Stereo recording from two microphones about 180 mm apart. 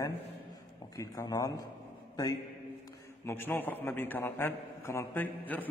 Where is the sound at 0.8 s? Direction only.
20° left (ahead or behind).